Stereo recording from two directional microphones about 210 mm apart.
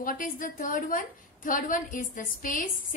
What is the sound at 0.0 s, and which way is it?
A woman's voice, 40° left (ahead or behind).